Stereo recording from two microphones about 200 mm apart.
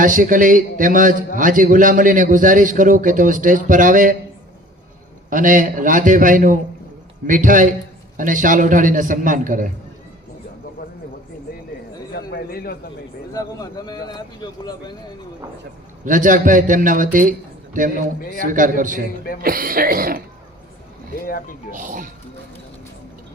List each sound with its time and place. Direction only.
0.0 s a man's voice: 40° right (ahead or behind)
5.3 s a man's voice: 40° right (ahead or behind)
12.1 s a sound: 50° left (ahead or behind)
13.3 s speech: 20° left (ahead or behind)
16.0 s a man's voice: 40° right (ahead or behind)
21.2 s speech: 45° left (ahead or behind)
21.7 s a man's voice: 40° right (ahead or behind)